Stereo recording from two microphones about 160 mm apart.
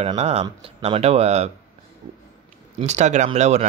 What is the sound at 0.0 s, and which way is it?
Speech, 40° right (ahead or behind).